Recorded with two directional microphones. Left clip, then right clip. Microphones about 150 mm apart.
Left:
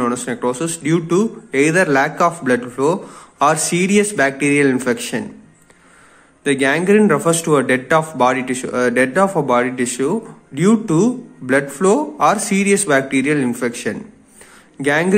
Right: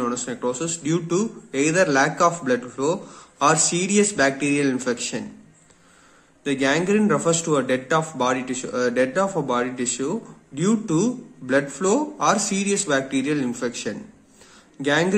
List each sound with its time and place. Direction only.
0.0 s a man's voice: 15° left (ahead or behind)
6.4 s a man's voice: 15° left (ahead or behind)